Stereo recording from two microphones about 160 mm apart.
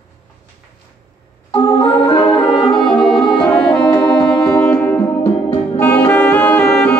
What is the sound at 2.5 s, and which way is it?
Brass instrument, 35° left (ahead or behind).